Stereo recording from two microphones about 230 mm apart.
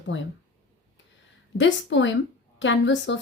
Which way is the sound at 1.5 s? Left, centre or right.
Left.